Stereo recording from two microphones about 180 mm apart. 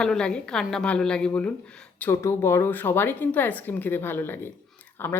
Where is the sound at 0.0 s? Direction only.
5° left (ahead or behind).